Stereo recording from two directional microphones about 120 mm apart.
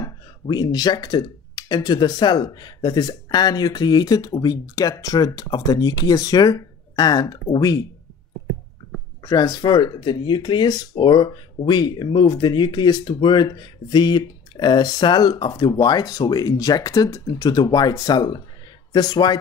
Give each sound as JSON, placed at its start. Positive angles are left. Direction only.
{"t": 0.0, "sound": "speech", "side_deg": 35}
{"t": 9.2, "sound": "speech", "side_deg": 35}